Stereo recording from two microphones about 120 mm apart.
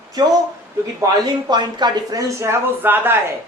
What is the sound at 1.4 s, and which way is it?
Speech, 35° right (ahead or behind).